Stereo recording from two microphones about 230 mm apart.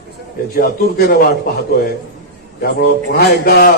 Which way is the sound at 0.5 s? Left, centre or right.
Left.